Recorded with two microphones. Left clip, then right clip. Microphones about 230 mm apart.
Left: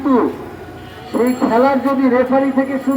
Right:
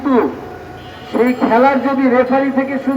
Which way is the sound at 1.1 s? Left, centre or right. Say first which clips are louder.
Right 2 dB; right.